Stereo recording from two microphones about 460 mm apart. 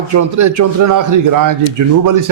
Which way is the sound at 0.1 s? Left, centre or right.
Right.